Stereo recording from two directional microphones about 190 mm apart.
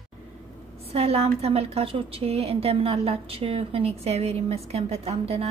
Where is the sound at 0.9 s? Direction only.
35° right (ahead or behind).